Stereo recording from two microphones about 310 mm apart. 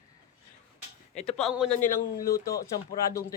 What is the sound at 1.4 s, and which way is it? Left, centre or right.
Speech, centre.